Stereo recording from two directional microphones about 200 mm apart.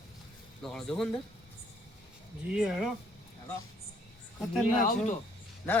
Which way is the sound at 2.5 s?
5° right (ahead or behind).